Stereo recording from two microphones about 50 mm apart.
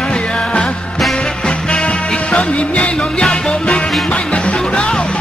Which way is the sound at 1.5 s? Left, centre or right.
Left.